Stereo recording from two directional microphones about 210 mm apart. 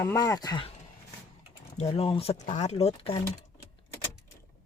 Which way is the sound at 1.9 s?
25° left (ahead or behind).